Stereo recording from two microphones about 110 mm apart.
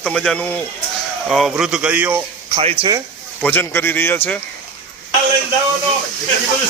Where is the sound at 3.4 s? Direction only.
20° left (ahead or behind).